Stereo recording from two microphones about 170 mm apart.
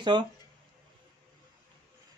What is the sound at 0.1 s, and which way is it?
Speech, 25° right (ahead or behind).